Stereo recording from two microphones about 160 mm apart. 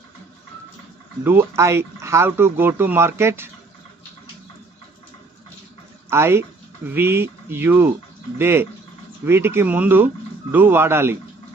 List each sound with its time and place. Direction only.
1.2 s speech: 15° right (ahead or behind)
6.1 s speech: 15° right (ahead or behind)